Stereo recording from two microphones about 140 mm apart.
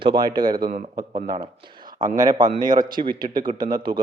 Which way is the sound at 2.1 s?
30° right (ahead or behind).